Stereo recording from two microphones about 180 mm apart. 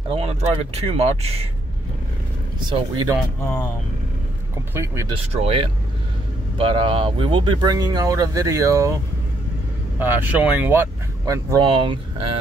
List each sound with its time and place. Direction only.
0.1 s speech: 30° right (ahead or behind)
2.7 s speech: 25° right (ahead or behind)
3.4 s speech: 5° left (ahead or behind)
4.7 s speech: 15° right (ahead or behind)
5.1 s speech: 35° right (ahead or behind); by 8.9 s 15° right (ahead or behind)
9.9 s speech: 10° right (ahead or behind); by 12.4 s 30° right (ahead or behind)